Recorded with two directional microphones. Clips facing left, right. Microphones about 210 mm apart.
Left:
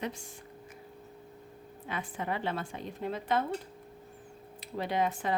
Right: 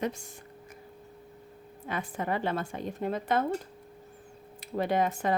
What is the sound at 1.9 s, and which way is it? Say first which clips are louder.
A woman's voice: right 3 dB; 45° right (ahead or behind).